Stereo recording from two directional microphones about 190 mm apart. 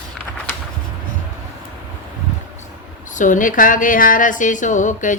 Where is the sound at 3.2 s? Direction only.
45° left (ahead or behind).